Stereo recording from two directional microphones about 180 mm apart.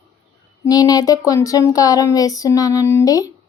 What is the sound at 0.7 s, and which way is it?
Speech, 20° left (ahead or behind).